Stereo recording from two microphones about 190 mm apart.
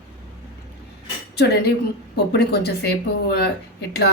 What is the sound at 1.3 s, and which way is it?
Speech, 60° left (ahead or behind).